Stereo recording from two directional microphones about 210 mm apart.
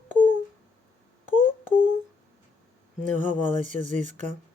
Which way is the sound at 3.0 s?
35° right (ahead or behind).